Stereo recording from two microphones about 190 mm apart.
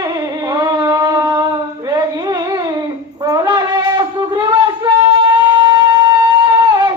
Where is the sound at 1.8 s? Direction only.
20° right (ahead or behind).